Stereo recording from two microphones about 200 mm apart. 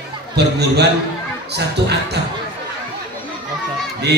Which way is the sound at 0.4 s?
55° right (ahead or behind).